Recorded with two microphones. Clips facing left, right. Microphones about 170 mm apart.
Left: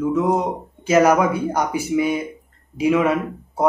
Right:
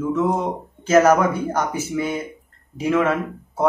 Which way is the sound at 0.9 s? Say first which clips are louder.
Even; 10° left (ahead or behind).